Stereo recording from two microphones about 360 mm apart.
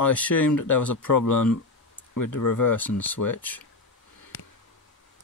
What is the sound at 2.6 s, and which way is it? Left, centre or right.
Speech, centre.